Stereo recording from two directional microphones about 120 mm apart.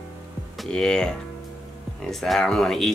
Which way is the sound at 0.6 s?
5° left (ahead or behind).